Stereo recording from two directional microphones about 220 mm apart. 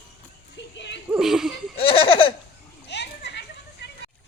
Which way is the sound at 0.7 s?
55° left (ahead or behind).